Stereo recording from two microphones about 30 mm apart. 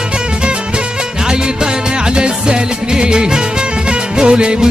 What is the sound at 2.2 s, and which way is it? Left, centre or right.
Music, right.